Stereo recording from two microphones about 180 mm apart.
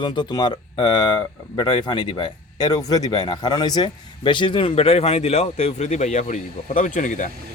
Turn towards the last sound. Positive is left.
turn(degrees=45)  # may be behind; listen again after turning